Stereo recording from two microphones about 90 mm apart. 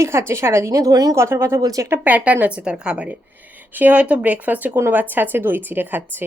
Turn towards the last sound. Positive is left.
turn(degrees=-20)  # may be behind; listen again after turning